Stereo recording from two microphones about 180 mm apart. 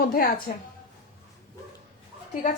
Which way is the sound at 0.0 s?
55° left (ahead or behind).